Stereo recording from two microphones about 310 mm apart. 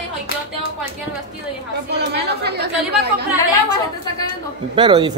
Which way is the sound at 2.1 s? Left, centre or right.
Right.